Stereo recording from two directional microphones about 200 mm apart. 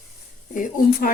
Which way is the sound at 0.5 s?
40° left (ahead or behind).